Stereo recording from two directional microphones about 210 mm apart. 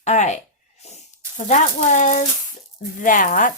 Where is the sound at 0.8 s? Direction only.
30° left (ahead or behind).